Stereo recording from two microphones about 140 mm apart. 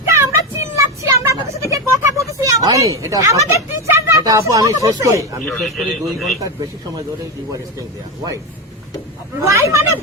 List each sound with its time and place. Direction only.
0.1 s vehicle: 20° right (ahead or behind)
5.5 s a man's voice: 5° left (ahead or behind)
9.4 s speech: 20° right (ahead or behind)